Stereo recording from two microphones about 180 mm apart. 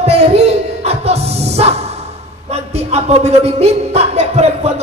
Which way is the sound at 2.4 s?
35° right (ahead or behind).